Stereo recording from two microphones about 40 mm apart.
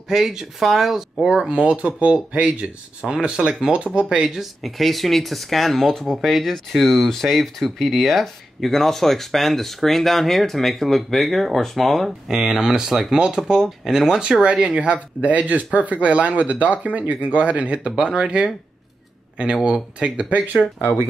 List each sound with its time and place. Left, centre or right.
0.1 s speech: centre
1.7 s speech: right
4.4 s speech: centre
12.3 s speech: centre; by 15.0 s right
15.2 s speech: right